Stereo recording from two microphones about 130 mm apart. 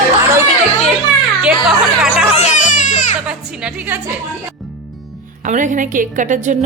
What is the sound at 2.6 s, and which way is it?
Music, 75° left (ahead or behind).